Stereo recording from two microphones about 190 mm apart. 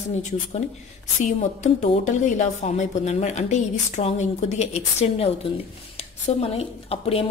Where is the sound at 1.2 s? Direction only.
40° left (ahead or behind).